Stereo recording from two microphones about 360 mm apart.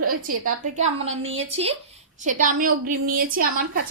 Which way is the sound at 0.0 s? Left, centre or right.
Right.